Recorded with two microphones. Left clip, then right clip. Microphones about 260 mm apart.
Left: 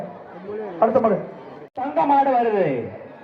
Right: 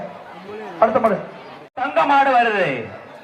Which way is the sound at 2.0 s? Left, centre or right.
Right.